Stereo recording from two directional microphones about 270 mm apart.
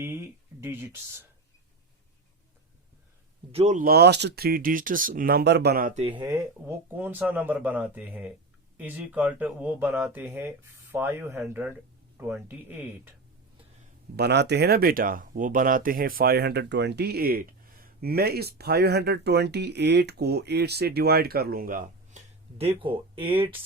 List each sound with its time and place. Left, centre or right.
0.0 s speech: centre
3.5 s speech: right; by 12.8 s centre
14.2 s speech: right; by 23.5 s centre